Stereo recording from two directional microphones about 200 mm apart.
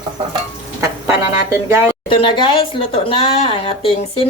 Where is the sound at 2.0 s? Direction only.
25° left (ahead or behind).